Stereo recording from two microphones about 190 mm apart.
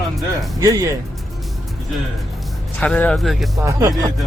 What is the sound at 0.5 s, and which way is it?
Speech, 20° right (ahead or behind).